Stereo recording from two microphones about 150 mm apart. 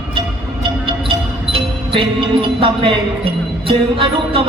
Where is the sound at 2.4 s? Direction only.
35° right (ahead or behind).